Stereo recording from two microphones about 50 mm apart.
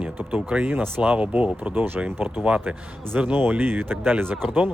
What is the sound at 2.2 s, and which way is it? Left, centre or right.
Speech, right.